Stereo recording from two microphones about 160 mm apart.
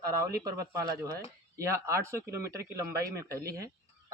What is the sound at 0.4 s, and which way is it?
Speech, 20° right (ahead or behind).